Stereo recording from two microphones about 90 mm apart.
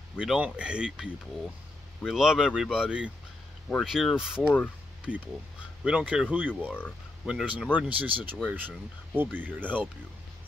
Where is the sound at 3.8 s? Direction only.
Centre (ahead or behind).